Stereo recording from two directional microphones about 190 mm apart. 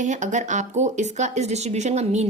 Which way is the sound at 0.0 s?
40° right (ahead or behind).